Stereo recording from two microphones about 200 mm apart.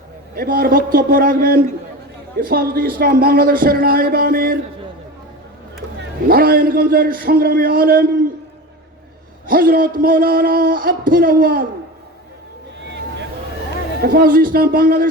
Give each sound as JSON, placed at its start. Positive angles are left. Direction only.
{"t": 0.3, "sound": "a man's voice", "side_deg": -50}
{"t": 6.2, "sound": "a man's voice", "side_deg": -50}
{"t": 9.5, "sound": "a man's voice", "side_deg": -45}
{"t": 14.0, "sound": "a man's voice", "side_deg": -45}